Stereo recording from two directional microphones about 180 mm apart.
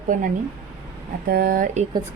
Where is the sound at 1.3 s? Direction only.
55° right (ahead or behind).